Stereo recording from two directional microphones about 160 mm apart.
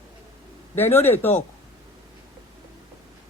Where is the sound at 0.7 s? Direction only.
15° left (ahead or behind).